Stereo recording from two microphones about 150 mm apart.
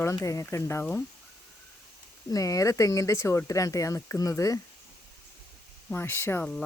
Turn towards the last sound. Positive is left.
turn(degrees=10)  # may be behind; listen again after turning